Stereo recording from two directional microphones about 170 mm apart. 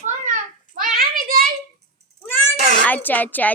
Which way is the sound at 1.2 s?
60° right (ahead or behind).